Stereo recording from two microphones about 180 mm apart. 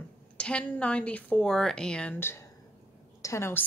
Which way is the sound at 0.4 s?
5° left (ahead or behind).